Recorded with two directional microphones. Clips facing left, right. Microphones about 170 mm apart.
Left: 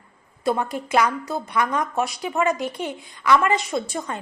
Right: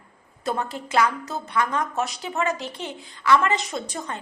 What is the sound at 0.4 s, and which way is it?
A woman's voice, 10° left (ahead or behind).